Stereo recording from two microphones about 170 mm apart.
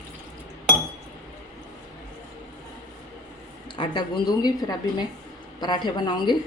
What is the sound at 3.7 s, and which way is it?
A woman's voice, 25° left (ahead or behind).